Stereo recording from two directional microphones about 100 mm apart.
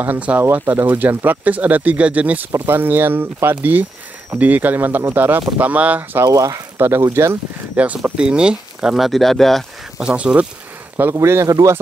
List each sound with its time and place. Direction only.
0.0 s speech: 15° right (ahead or behind)
6.2 s speech: 35° right (ahead or behind)
7.7 s speech: 15° right (ahead or behind); by 10.0 s centre (ahead or behind)
10.0 s speech: 10° right (ahead or behind)
11.0 s speech: 25° right (ahead or behind)